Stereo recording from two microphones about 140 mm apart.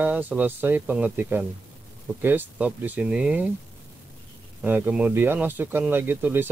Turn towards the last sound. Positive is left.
turn(degrees=-15)  # may be behind; listen again after turning